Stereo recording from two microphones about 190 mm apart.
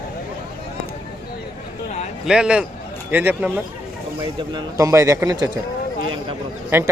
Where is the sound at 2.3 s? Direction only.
5° right (ahead or behind).